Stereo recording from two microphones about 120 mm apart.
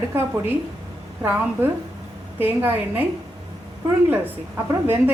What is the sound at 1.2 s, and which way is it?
A woman's voice, 20° right (ahead or behind).